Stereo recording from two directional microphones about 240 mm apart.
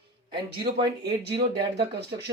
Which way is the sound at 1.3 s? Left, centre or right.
Right.